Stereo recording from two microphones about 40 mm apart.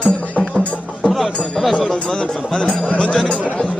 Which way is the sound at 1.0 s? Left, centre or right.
Centre.